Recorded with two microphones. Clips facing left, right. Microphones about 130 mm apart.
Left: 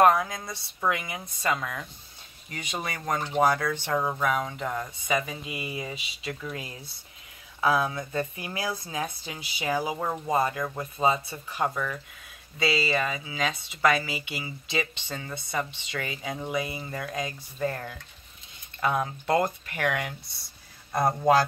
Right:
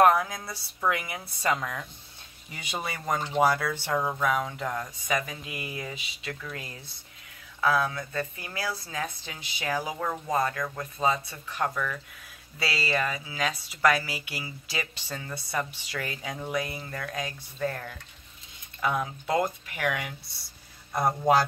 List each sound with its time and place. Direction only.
0.0 s speech: centre (ahead or behind)
12.5 s speech: 5° right (ahead or behind)
13.0 s speech: 10° left (ahead or behind); by 20.0 s 5° right (ahead or behind)